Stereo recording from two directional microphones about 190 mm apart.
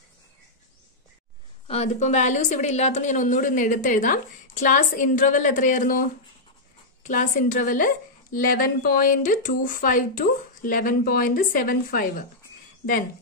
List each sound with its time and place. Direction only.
1.7 s a woman's voice: 35° left (ahead or behind)